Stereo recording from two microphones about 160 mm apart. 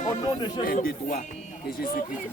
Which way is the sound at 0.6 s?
60° left (ahead or behind).